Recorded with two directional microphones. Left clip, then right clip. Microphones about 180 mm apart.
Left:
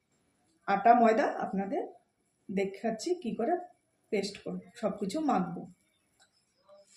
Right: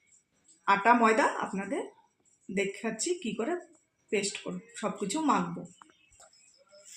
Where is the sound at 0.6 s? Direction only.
30° right (ahead or behind).